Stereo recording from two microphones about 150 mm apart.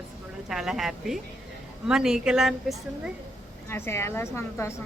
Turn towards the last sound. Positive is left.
turn(degrees=20)  # may be behind; listen again after turning